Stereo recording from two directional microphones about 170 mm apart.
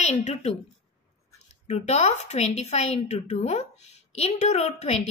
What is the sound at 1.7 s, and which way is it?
A woman's voice, 40° left (ahead or behind).